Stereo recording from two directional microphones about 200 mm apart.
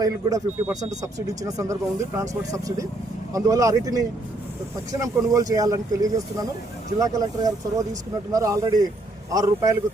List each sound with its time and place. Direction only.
0.0 s speech: 15° right (ahead or behind)